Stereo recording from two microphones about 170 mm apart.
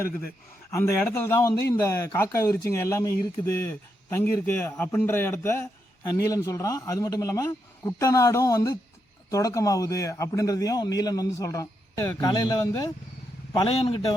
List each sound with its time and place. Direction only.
0.7 s a man's voice: 15° left (ahead or behind)
13.5 s a man's voice: 35° left (ahead or behind)